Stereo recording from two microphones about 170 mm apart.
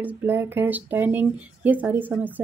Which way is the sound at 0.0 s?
15° right (ahead or behind).